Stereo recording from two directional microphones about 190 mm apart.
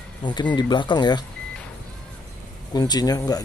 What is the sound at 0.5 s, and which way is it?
Speech, 25° left (ahead or behind).